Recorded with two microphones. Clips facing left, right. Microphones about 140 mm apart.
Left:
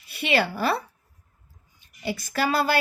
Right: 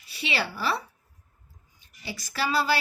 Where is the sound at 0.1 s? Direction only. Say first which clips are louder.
Left 7 dB; 55° left (ahead or behind).